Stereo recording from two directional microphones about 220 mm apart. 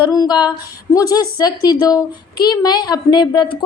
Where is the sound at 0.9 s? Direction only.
15° left (ahead or behind).